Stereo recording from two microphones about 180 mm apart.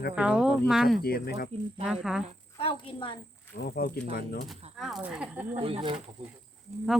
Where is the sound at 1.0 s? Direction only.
60° left (ahead or behind).